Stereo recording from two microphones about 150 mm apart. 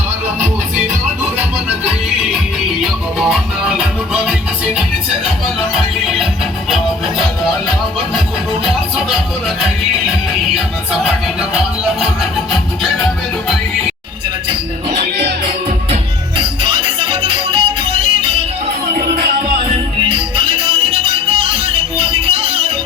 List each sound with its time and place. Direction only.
2.8 s music: 5° right (ahead or behind)
16.4 s music: 35° right (ahead or behind)